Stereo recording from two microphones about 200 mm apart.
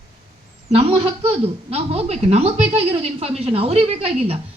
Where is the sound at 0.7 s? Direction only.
30° right (ahead or behind).